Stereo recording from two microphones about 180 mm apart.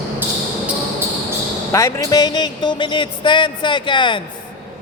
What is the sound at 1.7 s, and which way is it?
Speech, 15° left (ahead or behind).